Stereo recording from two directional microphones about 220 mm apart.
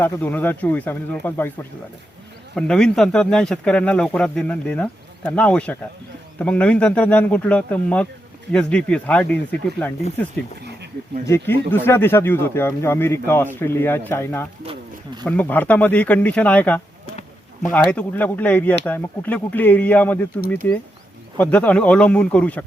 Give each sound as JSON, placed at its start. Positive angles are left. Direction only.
{"t": 0.0, "sound": "speech", "side_deg": 10}
{"t": 2.6, "sound": "speech", "side_deg": 5}
{"t": 11.3, "sound": "speech", "side_deg": 10}
{"t": 14.6, "sound": "a sound", "side_deg": -25}
{"t": 15.2, "sound": "speech", "side_deg": 5}